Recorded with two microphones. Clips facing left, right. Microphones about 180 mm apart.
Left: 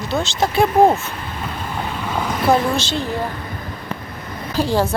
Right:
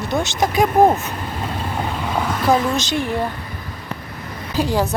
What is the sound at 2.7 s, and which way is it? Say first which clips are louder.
Speech: right 1 dB; 25° left (ahead or behind).